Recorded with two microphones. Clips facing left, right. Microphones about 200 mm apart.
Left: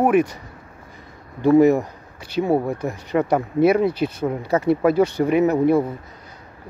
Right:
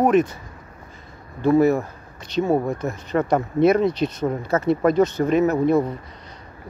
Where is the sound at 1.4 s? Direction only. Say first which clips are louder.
Left 3 dB; 15° left (ahead or behind).